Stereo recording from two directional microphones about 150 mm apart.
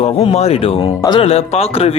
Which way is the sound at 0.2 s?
45° left (ahead or behind).